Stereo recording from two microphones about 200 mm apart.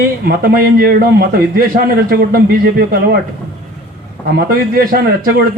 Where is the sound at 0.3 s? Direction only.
50° right (ahead or behind).